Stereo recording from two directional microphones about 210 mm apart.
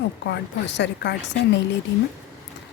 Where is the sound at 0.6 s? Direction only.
55° left (ahead or behind).